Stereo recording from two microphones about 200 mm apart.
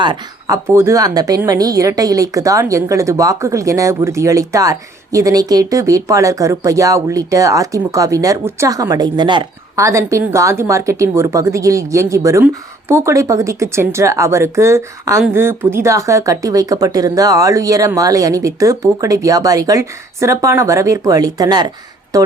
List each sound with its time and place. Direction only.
0.0 s speech: 20° right (ahead or behind)